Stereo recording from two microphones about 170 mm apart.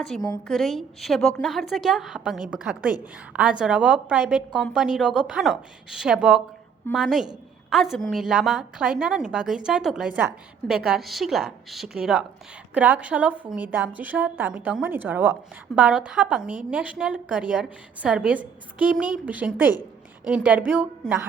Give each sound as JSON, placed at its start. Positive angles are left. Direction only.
{"t": 0.0, "sound": "a woman's voice", "side_deg": 5}